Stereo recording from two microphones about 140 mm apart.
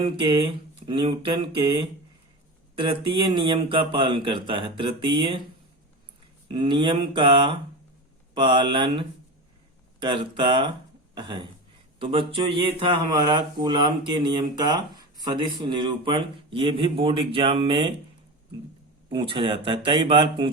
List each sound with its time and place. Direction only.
0.0 s speech: 35° right (ahead or behind)
6.5 s speech: 35° right (ahead or behind)
19.0 s speech: 35° right (ahead or behind)